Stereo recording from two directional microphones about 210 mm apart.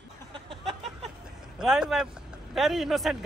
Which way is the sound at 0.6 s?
Centre (ahead or behind).